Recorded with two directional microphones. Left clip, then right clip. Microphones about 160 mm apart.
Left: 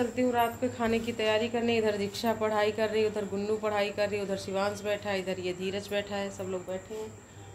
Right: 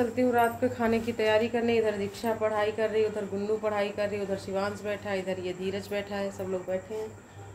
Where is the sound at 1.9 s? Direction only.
30° left (ahead or behind).